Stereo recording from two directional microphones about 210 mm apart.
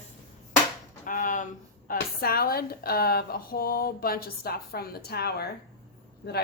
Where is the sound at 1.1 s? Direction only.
40° left (ahead or behind).